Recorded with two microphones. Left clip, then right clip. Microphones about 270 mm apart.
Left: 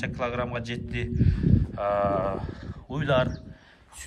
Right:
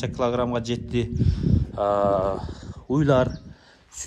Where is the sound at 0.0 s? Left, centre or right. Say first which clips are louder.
Right 5 dB; centre.